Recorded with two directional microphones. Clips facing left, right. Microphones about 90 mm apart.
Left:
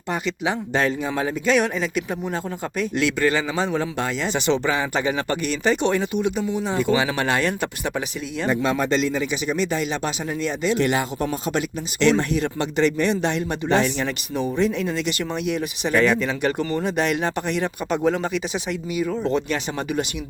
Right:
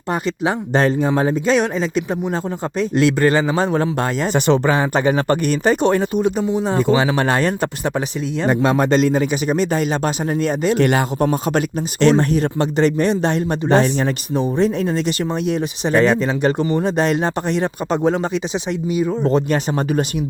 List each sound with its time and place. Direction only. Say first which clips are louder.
0.1 s speech: right 4 dB; 40° right (ahead or behind); by 2.0 s 25° right (ahead or behind)
2.7 s a man's voice: right 6 dB; 40° right (ahead or behind)
8.4 s a man's voice: right 5 dB; 55° right (ahead or behind); by 18.3 s 30° right (ahead or behind)
19.2 s speech: right 6 dB; 40° right (ahead or behind)